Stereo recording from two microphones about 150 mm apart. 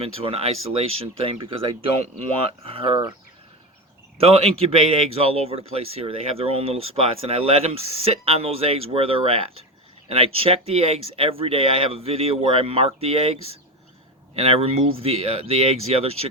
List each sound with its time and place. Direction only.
0.0 s speech: 40° right (ahead or behind)
4.2 s speech: 40° right (ahead or behind)